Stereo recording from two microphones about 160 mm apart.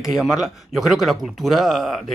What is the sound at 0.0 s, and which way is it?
Speech, centre (ahead or behind).